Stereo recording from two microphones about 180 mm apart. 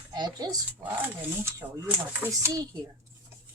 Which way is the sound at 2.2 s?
15° right (ahead or behind).